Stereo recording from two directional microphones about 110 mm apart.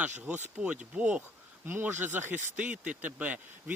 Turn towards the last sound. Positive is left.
turn(degrees=-15)  # may be behind; listen again after turning